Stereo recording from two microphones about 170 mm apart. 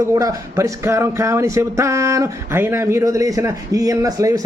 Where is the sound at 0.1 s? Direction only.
20° right (ahead or behind).